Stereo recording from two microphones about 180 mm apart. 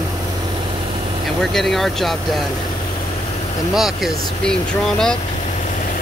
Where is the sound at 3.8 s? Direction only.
Centre (ahead or behind).